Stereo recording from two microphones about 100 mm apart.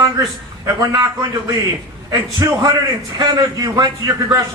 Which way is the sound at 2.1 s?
35° right (ahead or behind).